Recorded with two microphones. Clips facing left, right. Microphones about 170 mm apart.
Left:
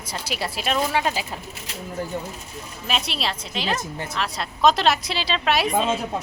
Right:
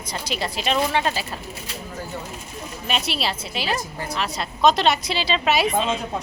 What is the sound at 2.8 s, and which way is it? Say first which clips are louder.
Speech: right 1 dB; centre (ahead or behind).